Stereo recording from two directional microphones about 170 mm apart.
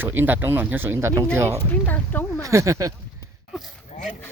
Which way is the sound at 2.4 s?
20° right (ahead or behind).